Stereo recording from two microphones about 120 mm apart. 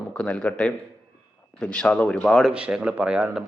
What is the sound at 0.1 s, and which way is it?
A man's voice, 5° left (ahead or behind).